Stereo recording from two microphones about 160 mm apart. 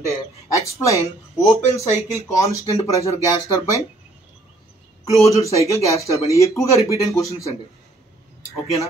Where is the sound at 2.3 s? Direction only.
20° left (ahead or behind).